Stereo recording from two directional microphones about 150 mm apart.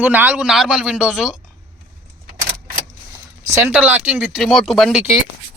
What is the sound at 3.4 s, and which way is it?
Speech, 20° right (ahead or behind).